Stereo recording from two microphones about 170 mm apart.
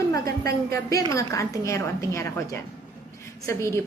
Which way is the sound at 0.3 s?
65° right (ahead or behind).